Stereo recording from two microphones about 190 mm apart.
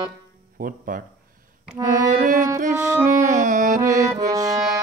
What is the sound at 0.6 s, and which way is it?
Music, 45° right (ahead or behind).